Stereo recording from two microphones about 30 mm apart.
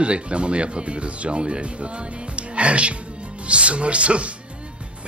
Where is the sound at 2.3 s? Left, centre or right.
Right.